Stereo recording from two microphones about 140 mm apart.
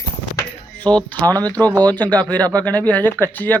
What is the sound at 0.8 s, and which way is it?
Speech, 10° left (ahead or behind).